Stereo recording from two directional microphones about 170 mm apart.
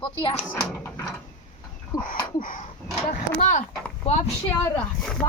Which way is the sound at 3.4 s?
40° left (ahead or behind).